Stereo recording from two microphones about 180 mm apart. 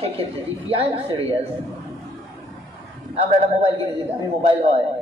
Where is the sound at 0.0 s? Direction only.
30° right (ahead or behind).